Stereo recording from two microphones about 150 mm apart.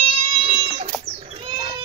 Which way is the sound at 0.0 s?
55° right (ahead or behind).